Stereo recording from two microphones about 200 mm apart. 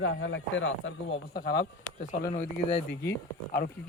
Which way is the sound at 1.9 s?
35° left (ahead or behind).